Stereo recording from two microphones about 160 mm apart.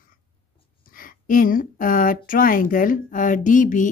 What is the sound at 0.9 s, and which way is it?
Speech, 60° left (ahead or behind).